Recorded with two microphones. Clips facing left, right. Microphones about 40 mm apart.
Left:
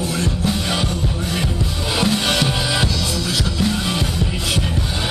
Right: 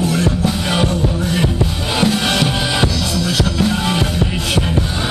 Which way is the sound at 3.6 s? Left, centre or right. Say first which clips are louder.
Right 3 dB; right.